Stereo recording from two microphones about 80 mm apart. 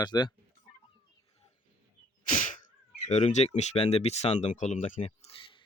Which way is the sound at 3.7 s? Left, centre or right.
Left.